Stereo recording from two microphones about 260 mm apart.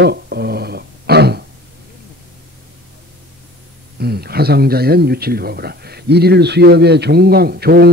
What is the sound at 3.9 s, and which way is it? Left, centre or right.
A man's voice, right.